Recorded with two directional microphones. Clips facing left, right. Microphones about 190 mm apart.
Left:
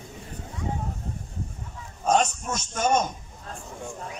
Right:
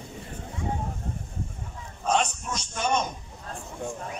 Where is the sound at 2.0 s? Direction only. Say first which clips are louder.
Left 3 dB; 45° left (ahead or behind).